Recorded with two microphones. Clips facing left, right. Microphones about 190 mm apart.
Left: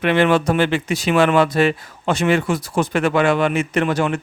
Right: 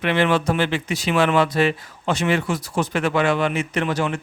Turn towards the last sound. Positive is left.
turn(degrees=55)  # may be behind; listen again after turning